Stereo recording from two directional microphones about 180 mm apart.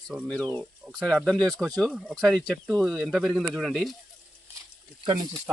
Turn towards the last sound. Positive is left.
turn(degrees=-25)  # may be behind; listen again after turning